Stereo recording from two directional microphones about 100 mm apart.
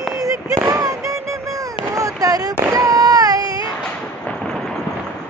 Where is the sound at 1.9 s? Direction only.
35° right (ahead or behind).